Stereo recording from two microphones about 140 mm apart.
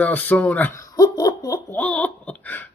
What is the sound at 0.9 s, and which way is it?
Laughter, 25° left (ahead or behind).